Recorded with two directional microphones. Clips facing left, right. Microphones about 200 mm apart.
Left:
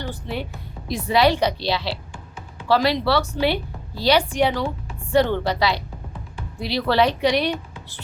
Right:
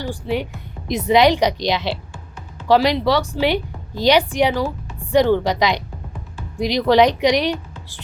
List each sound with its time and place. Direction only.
0.0 s a woman's voice: 10° right (ahead or behind)